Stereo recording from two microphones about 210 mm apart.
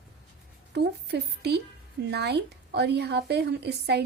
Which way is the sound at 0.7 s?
55° right (ahead or behind).